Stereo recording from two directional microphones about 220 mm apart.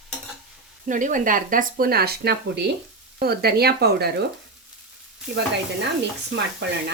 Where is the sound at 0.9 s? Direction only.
35° right (ahead or behind).